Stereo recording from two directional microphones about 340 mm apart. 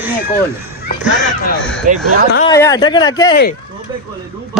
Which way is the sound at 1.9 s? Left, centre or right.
Right.